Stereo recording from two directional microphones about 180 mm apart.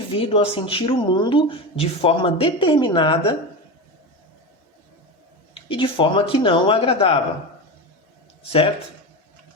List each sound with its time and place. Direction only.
0.1 s speech: 30° left (ahead or behind)
5.5 s speech: 30° left (ahead or behind)